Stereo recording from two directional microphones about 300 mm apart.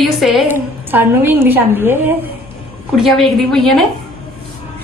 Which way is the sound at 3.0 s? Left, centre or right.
Centre.